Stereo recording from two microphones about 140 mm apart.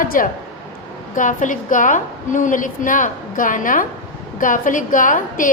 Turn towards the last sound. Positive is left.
turn(degrees=70)  # may be behind; listen again after turning